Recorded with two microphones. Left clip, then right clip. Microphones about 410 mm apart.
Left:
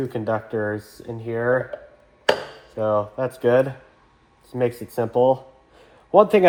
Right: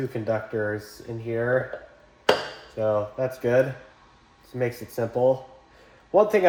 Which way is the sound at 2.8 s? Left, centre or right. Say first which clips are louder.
Left 3 dB; centre.